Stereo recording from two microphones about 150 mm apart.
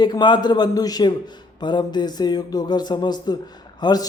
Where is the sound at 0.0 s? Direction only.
30° left (ahead or behind).